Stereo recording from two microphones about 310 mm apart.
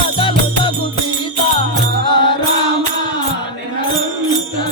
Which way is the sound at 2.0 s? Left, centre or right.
Centre.